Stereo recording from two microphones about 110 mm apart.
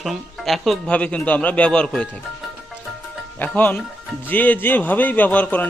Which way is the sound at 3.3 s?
15° left (ahead or behind).